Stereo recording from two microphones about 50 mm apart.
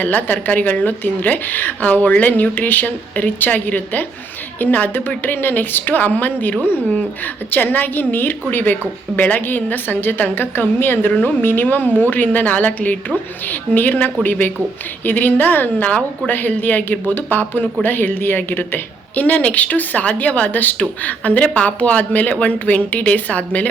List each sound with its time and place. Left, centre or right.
0.0 s a woman's voice: left
7.5 s a woman's voice: left
11.1 s a woman's voice: left